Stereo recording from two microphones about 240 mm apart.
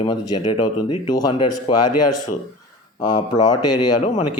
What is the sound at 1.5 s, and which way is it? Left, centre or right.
Speech, left.